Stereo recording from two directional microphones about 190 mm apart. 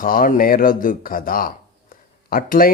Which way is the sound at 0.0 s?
50° left (ahead or behind).